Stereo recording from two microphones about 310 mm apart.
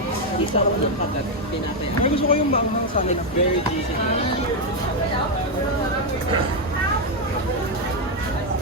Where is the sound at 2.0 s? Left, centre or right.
Centre.